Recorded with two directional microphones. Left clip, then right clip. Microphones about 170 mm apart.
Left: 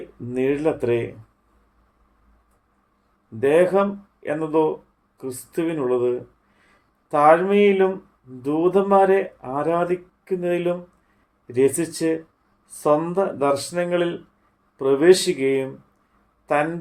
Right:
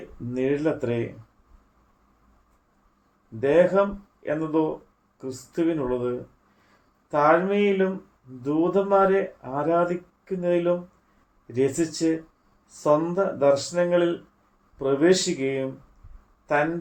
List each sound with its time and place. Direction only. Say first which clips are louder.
0.3 s speech: left 3 dB; 50° left (ahead or behind)
3.4 s speech: left 2 dB; 50° left (ahead or behind)